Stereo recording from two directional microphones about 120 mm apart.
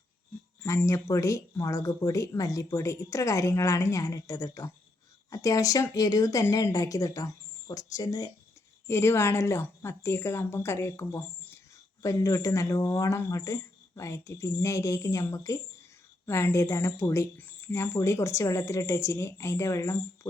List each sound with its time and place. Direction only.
0.6 s speech: 25° left (ahead or behind)